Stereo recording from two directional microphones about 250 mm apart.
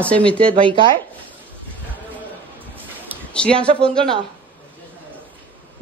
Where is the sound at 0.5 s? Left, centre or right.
Right.